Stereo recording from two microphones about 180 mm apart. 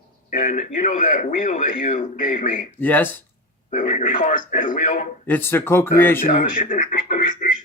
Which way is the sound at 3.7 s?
45° left (ahead or behind).